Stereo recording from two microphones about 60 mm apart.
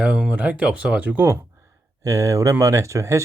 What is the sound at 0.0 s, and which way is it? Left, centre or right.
Speech, centre.